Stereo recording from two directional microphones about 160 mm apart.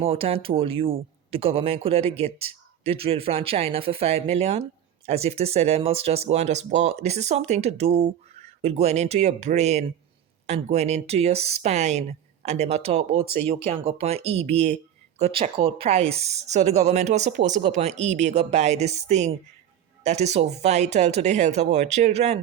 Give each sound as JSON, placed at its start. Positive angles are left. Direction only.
{"t": 0.0, "sound": "speech", "side_deg": -35}